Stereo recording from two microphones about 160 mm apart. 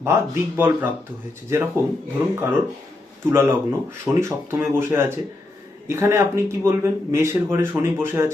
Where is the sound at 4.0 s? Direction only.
20° right (ahead or behind).